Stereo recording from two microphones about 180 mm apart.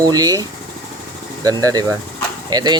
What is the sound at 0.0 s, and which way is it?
Speech, 20° right (ahead or behind).